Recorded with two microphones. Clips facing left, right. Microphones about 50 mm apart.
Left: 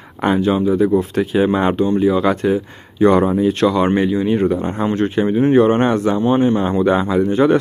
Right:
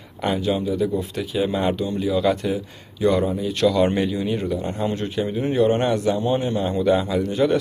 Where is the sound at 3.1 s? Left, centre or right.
Left.